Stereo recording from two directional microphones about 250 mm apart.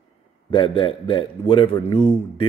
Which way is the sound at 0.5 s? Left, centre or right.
Centre.